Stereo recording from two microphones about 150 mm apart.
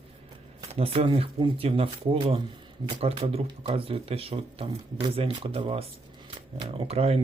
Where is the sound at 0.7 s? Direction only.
40° right (ahead or behind).